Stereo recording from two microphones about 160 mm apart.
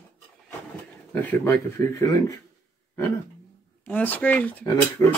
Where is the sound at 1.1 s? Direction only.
15° left (ahead or behind).